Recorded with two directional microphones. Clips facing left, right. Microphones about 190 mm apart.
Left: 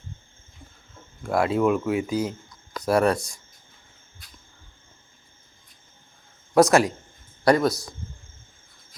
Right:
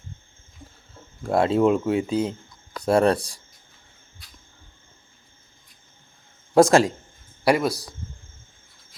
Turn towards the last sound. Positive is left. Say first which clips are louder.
# left 1 dB
turn(degrees=-10)  # may be behind; listen again after turning